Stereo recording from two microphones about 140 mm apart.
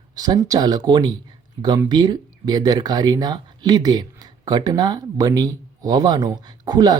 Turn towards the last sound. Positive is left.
turn(degrees=-30)  # may be behind; listen again after turning